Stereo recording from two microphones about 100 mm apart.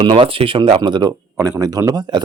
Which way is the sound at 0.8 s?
45° right (ahead or behind).